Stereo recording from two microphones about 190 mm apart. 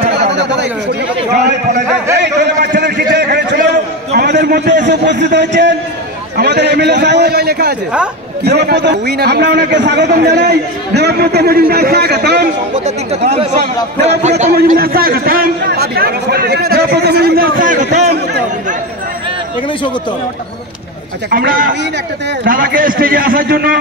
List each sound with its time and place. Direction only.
0.3 s chatter: 65° right (ahead or behind)
2.1 s a sound: 65° right (ahead or behind)
4.8 s a man's voice: 65° right (ahead or behind)
12.7 s speech: 35° right (ahead or behind)
14.4 s a man's voice: 45° right (ahead or behind)
21.3 s a man's voice: 50° right (ahead or behind)